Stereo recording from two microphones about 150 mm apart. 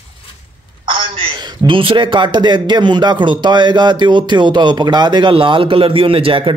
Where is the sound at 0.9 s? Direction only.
30° right (ahead or behind).